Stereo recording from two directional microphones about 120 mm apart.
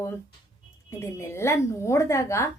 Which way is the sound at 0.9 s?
20° left (ahead or behind).